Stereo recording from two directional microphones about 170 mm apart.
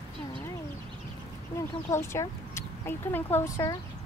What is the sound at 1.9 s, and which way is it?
Speech, 15° left (ahead or behind).